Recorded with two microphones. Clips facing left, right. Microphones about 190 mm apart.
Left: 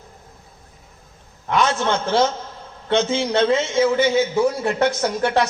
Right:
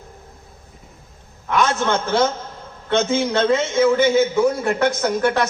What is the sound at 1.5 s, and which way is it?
A man's voice, 50° right (ahead or behind).